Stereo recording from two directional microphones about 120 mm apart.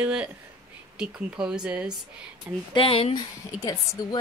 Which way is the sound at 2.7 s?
50° left (ahead or behind).